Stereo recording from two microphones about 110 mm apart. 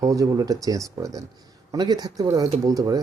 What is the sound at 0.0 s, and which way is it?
Speech, 30° right (ahead or behind).